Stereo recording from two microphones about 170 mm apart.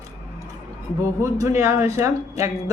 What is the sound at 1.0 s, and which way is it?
A man's voice, 15° right (ahead or behind).